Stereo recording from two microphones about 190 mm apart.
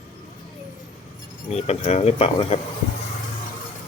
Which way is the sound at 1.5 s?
35° left (ahead or behind).